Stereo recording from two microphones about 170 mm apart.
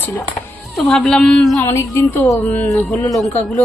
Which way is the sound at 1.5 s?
15° left (ahead or behind).